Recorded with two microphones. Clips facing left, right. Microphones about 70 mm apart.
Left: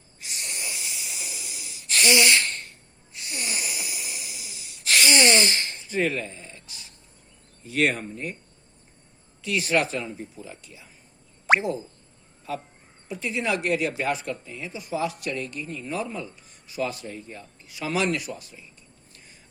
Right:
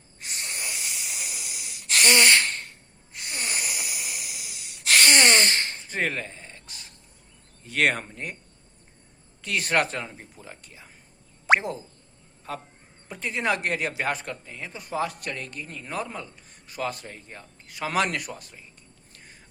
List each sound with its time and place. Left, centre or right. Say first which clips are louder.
0.2 s breathing: right 1 dB; right
3.1 s wheeze: right 1 dB; right
7.6 s a man's voice: even; right
9.4 s a man's voice: left 1 dB; right
12.5 s a man's voice: left 3 dB; right
19.1 s cricket: right 3 dB; right